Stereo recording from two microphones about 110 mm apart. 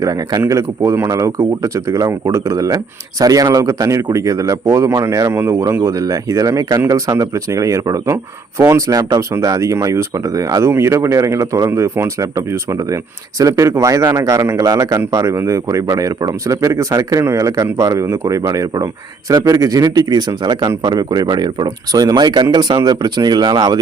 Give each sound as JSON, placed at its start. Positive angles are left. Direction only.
{"t": 0.0, "sound": "speech", "side_deg": -35}